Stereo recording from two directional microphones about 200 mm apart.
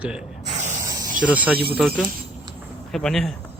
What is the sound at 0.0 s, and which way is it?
Speech, 5° right (ahead or behind).